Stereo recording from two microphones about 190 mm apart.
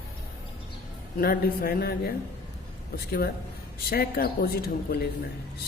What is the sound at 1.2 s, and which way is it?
Speech, 50° left (ahead or behind).